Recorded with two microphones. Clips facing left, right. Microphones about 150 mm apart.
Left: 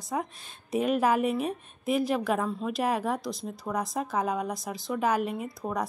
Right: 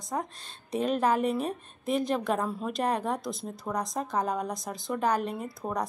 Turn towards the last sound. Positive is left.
turn(degrees=5)  # may be behind; listen again after turning